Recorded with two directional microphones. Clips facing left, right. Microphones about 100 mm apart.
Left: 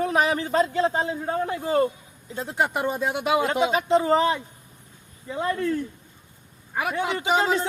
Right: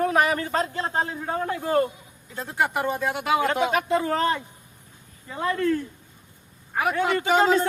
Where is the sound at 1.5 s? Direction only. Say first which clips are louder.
Right 1 dB; 20° left (ahead or behind).